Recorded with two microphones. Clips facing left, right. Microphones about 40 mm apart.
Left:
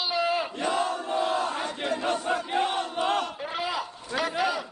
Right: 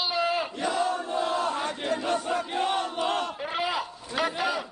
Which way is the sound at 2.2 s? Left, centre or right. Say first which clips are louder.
Left 1 dB; centre.